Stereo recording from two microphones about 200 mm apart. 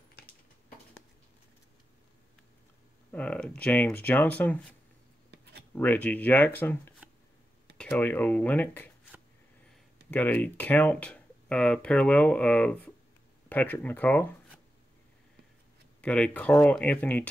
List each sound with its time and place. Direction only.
3.1 s speech: 5° left (ahead or behind)
5.3 s a sound: 55° right (ahead or behind)
5.8 s speech: 10° left (ahead or behind)
10.1 s speech: 10° left (ahead or behind)
16.0 s speech: 5° left (ahead or behind)